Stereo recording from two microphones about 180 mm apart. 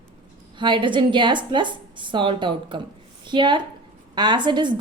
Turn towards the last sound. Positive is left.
turn(degrees=-25)  # may be behind; listen again after turning